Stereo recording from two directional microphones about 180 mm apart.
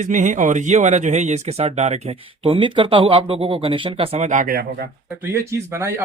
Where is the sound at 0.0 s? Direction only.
45° right (ahead or behind).